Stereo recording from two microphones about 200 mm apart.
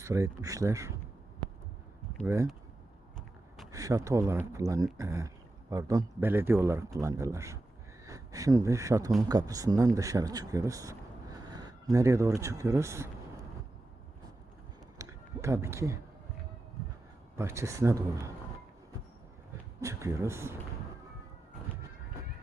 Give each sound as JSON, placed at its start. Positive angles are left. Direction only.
{"t": 0.0, "sound": "speech", "side_deg": -15}
{"t": 2.2, "sound": "speech", "side_deg": -15}
{"t": 3.7, "sound": "speech", "side_deg": -15}
{"t": 14.9, "sound": "a sound", "side_deg": -15}
{"t": 17.3, "sound": "speech", "side_deg": -15}
{"t": 19.8, "sound": "speech", "side_deg": -15}